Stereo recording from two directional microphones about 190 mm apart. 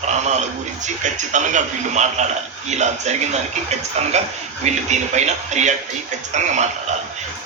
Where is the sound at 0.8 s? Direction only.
40° right (ahead or behind).